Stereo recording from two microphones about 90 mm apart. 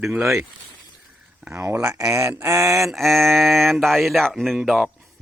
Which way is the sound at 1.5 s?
35° right (ahead or behind).